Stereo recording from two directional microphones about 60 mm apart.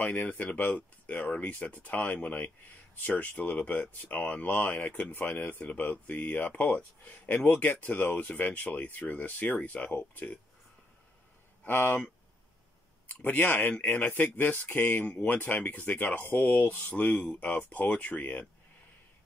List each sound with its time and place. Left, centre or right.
0.0 s speech: left
11.6 s speech: left
13.1 s speech: left